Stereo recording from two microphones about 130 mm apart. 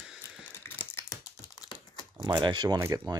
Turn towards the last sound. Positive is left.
turn(degrees=-20)  # may be behind; listen again after turning